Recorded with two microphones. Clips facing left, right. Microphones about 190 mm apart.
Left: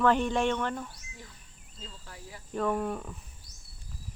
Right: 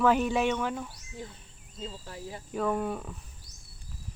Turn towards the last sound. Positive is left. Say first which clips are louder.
# even
turn(degrees=0)  # may be behind; listen again after turning